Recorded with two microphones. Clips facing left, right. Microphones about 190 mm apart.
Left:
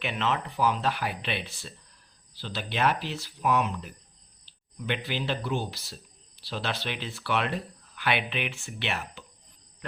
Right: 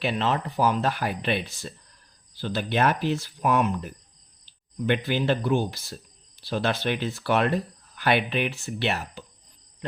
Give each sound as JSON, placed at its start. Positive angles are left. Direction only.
{"t": 0.0, "sound": "speech", "side_deg": -35}